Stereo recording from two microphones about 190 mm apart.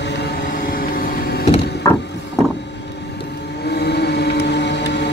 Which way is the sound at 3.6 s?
60° left (ahead or behind).